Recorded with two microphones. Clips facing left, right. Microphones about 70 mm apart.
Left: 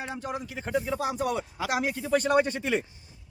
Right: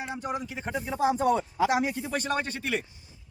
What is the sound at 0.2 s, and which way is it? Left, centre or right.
Speech, right.